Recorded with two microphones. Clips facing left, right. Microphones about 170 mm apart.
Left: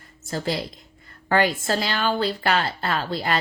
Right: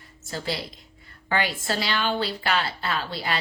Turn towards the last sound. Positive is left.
turn(degrees=45)  # may be behind; listen again after turning